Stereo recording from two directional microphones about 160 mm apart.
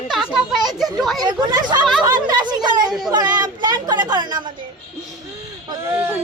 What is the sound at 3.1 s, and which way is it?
Speech, 25° right (ahead or behind).